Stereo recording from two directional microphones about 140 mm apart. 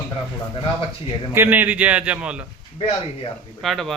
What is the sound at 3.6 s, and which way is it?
Speech, centre (ahead or behind).